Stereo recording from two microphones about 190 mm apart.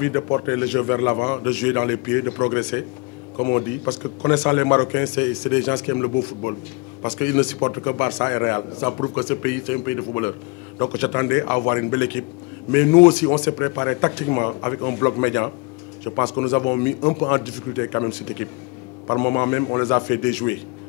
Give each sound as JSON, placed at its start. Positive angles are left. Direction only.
{"t": 0.0, "sound": "a man's voice", "side_deg": 15}